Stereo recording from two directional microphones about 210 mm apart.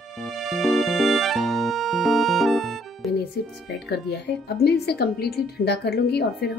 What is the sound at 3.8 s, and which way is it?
A woman's voice, 55° left (ahead or behind).